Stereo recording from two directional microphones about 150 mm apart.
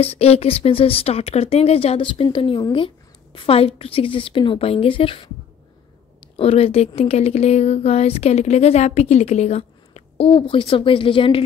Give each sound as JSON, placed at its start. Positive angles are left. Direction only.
{"t": 0.0, "sound": "speech", "side_deg": 40}
{"t": 6.3, "sound": "a woman's voice", "side_deg": 40}